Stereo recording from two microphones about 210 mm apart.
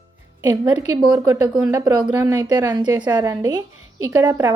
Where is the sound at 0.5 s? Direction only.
15° right (ahead or behind).